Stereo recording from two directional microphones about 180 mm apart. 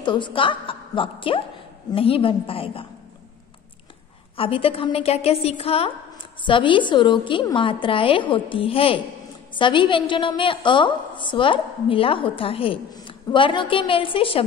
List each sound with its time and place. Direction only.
0.0 s a woman's voice: 25° left (ahead or behind)
4.4 s a woman's voice: 30° left (ahead or behind)